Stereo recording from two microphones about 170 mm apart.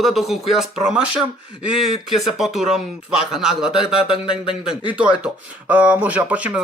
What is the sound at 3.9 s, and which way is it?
Speech, 35° left (ahead or behind).